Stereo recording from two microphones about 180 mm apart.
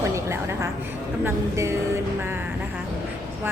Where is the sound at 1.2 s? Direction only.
15° right (ahead or behind).